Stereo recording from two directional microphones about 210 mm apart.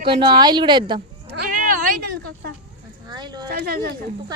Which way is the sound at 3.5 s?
45° right (ahead or behind).